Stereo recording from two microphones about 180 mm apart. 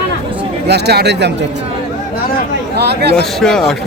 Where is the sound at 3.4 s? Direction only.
Centre (ahead or behind).